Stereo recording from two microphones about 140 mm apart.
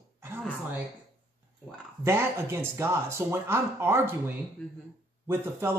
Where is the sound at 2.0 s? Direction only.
20° right (ahead or behind).